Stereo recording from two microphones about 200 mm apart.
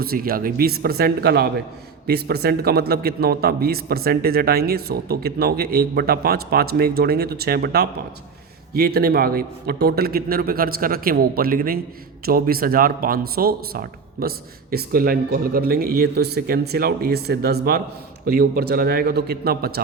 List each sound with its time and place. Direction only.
0.0 s a man's voice: 50° right (ahead or behind)